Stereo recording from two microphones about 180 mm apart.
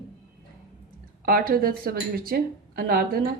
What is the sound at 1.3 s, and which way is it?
Speech, 55° right (ahead or behind).